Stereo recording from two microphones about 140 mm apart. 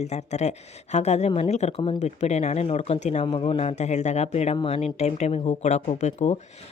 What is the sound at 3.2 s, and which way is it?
A woman's voice, 40° left (ahead or behind).